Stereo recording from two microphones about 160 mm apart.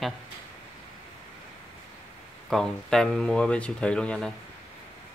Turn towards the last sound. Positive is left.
turn(degrees=5)  # may be behind; listen again after turning